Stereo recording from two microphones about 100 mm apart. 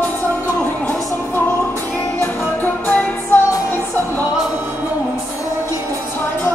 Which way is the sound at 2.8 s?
20° left (ahead or behind).